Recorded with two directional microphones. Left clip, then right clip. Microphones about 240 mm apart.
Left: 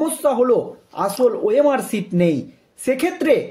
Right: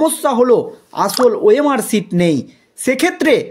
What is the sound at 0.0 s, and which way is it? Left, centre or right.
Speech, right.